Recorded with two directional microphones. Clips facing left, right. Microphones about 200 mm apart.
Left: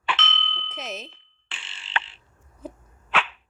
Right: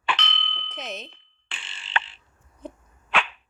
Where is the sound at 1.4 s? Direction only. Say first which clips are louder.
Right 1 dB; 50° right (ahead or behind).